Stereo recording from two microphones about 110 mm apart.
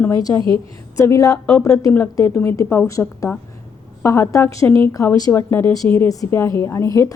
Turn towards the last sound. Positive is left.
turn(degrees=30)  # may be behind; listen again after turning